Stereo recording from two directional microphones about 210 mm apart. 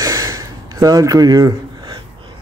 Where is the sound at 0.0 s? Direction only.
15° right (ahead or behind).